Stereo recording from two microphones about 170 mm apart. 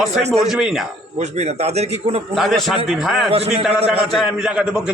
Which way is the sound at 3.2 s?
35° right (ahead or behind).